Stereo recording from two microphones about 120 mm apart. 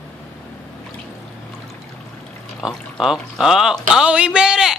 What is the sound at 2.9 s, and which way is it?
Speech, 5° right (ahead or behind).